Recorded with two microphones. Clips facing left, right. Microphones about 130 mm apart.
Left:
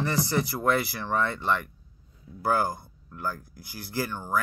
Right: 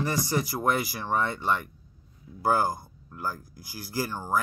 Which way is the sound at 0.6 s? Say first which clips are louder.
Left 1 dB; 20° right (ahead or behind).